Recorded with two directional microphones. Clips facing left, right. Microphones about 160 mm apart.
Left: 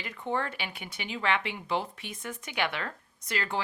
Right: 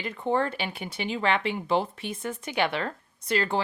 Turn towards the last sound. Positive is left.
turn(degrees=-30)  # may be behind; listen again after turning